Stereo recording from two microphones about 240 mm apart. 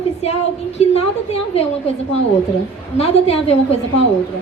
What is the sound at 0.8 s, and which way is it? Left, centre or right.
Speech, left.